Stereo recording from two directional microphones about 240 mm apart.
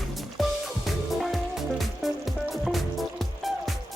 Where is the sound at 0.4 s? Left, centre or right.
Centre.